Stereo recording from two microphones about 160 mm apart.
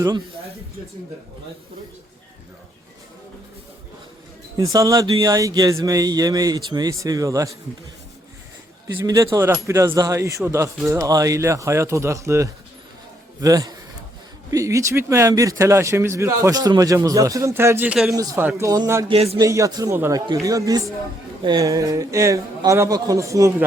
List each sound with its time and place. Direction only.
4.5 s speech: 25° right (ahead or behind)
9.0 s speech: 20° right (ahead or behind); by 18.2 s 5° right (ahead or behind)
18.2 s speech: 20° right (ahead or behind)
19.0 s a man's voice: 40° right (ahead or behind)
19.4 s speech: 20° right (ahead or behind)